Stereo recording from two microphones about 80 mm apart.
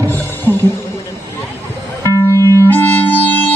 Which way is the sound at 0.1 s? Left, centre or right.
Left.